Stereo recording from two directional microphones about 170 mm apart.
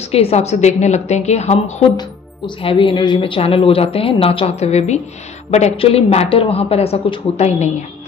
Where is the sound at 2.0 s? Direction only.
30° left (ahead or behind).